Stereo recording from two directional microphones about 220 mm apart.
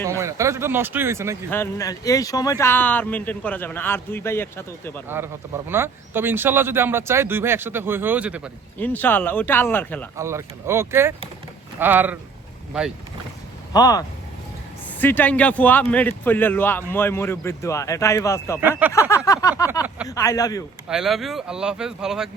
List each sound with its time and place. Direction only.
0.0 s speech: 15° right (ahead or behind)
1.5 s speech: 10° left (ahead or behind)
5.0 s speech: 10° right (ahead or behind)
8.8 s speech: 10° left (ahead or behind)
10.2 s speech: 10° right (ahead or behind)
13.7 s speech: 15° left (ahead or behind)
18.8 s speech: 10° right (ahead or behind)
19.1 s speech: 15° left (ahead or behind)
20.8 s speech: centre (ahead or behind)